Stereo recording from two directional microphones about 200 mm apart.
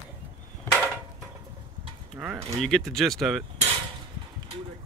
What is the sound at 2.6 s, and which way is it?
Speech, centre (ahead or behind).